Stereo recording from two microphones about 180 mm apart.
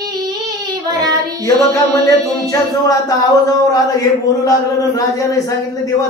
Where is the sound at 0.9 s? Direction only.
20° right (ahead or behind).